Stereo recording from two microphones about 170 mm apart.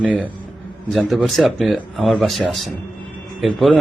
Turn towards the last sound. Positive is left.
turn(degrees=0)  # may be behind; listen again after turning